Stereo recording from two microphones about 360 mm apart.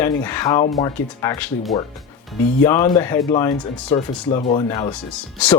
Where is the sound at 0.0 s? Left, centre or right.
Centre.